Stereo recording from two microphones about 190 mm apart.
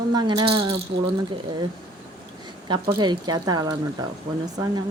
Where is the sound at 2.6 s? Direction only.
25° right (ahead or behind).